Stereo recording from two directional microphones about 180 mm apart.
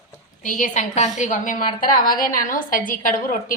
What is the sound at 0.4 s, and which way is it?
A woman's voice, 45° left (ahead or behind).